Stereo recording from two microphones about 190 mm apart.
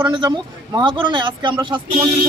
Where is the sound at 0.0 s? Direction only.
25° right (ahead or behind).